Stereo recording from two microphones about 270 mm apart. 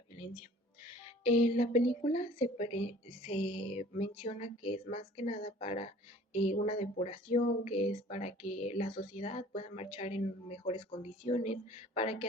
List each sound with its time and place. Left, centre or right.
1.4 s speech: left